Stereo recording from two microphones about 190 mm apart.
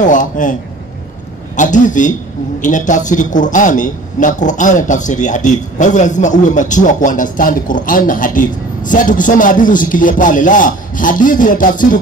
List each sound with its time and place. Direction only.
0.0 s a man's voice: 40° left (ahead or behind)
1.6 s a man's voice: 40° left (ahead or behind)